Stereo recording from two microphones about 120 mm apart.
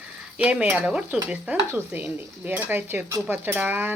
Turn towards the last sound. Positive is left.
turn(degrees=-15)  # may be behind; listen again after turning